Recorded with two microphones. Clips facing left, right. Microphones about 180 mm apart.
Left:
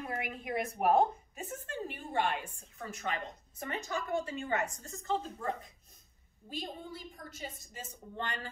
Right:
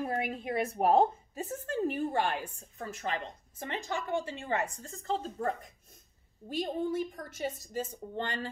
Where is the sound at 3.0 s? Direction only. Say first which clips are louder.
Right 2 dB; 30° right (ahead or behind).